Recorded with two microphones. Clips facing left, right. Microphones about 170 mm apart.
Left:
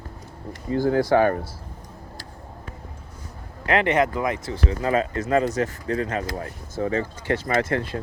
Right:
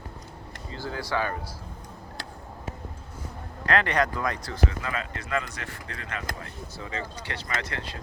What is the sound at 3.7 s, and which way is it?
Speech, 20° left (ahead or behind).